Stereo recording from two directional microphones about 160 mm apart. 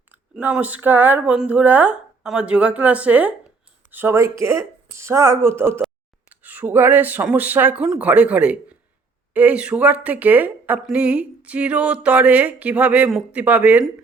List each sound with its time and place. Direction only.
0.1 s a woman's voice: 10° right (ahead or behind)